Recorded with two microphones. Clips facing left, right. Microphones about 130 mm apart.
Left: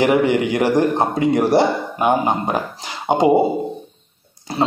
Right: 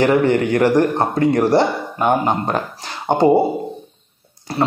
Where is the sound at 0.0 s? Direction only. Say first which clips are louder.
Right 1 dB; 15° left (ahead or behind).